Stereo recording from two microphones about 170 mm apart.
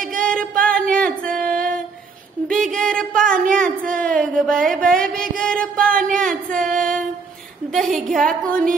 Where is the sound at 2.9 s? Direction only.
55° right (ahead or behind).